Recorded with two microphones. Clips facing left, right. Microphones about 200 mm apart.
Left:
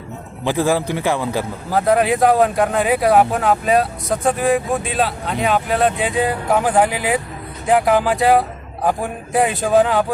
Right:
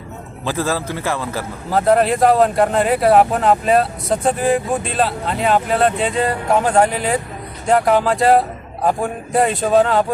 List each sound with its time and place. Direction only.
0.4 s a man's voice: 15° left (ahead or behind)
1.7 s speech: centre (ahead or behind)